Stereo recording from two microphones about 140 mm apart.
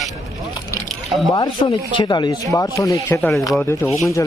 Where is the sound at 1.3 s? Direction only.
35° left (ahead or behind).